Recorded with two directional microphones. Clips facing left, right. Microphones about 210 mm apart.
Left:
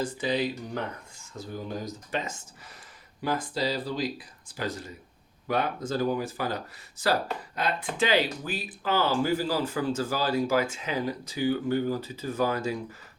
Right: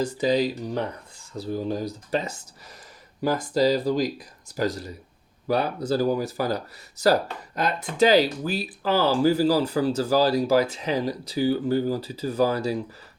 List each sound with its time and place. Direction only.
0.0 s speech: 40° right (ahead or behind)